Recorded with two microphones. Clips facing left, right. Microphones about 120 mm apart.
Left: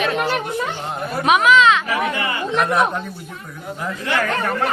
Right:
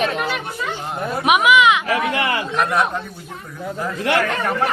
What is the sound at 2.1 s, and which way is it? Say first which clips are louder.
Speech: right 3 dB; 75° right (ahead or behind).